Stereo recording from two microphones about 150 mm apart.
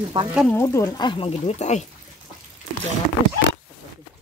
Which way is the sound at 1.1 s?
40° left (ahead or behind).